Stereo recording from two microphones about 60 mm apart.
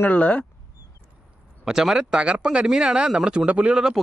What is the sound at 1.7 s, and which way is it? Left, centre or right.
Speech, centre.